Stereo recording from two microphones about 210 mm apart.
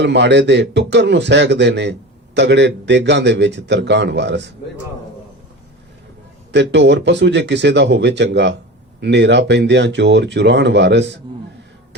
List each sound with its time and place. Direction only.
0.0 s speech: 55° right (ahead or behind)
6.5 s speech: 55° right (ahead or behind)